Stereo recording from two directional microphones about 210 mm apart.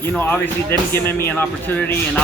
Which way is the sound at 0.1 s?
10° left (ahead or behind).